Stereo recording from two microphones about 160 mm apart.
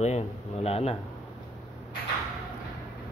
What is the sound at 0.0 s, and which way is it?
Speech, 40° left (ahead or behind).